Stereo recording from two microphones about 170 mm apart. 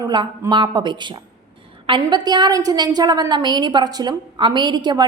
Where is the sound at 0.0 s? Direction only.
25° right (ahead or behind).